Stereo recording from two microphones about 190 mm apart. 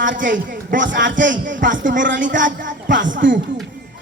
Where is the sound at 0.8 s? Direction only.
75° right (ahead or behind).